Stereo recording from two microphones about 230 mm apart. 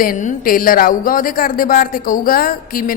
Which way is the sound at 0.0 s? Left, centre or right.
Left.